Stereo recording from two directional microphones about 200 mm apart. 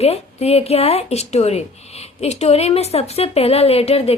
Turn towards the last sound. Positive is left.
turn(degrees=30)  # may be behind; listen again after turning